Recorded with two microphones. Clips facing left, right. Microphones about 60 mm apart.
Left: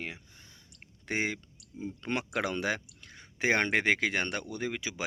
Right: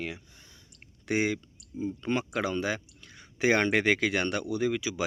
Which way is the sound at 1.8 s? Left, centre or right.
Left.